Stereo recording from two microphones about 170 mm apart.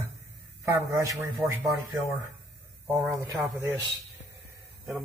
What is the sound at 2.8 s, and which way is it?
Speech, 15° right (ahead or behind).